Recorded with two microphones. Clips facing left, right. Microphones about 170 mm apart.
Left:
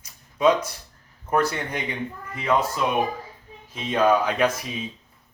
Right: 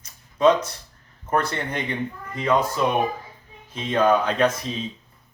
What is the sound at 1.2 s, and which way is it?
Speech, 10° left (ahead or behind).